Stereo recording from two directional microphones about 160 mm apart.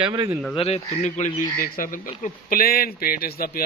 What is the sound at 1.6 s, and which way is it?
A man's voice, 60° left (ahead or behind).